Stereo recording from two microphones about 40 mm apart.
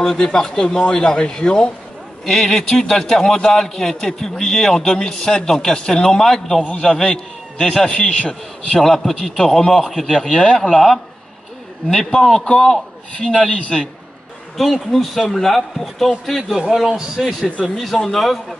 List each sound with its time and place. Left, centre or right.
0.0 s a man's voice: centre
2.2 s a man's voice: centre
8.8 s a man's voice: centre
10.3 s a man's voice: left
10.7 s a man's voice: centre
12.4 s a man's voice: left
12.6 s a man's voice: centre
13.4 s a man's voice: left
14.6 s a man's voice: centre